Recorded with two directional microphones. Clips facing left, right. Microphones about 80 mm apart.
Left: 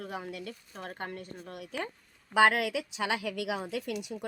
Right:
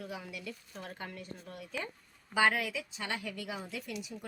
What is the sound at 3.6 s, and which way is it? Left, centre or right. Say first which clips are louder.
Speech: left 6 dB; left.